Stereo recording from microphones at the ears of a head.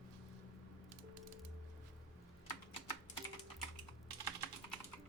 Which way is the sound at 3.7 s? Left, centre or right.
Right.